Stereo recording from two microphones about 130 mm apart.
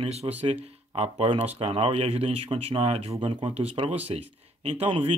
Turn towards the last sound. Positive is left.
turn(degrees=-50)  # may be behind; listen again after turning